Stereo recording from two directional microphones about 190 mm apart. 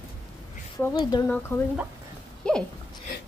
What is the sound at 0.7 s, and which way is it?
A woman's voice, 20° left (ahead or behind).